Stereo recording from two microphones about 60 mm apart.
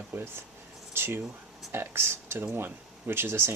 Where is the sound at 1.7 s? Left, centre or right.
Right.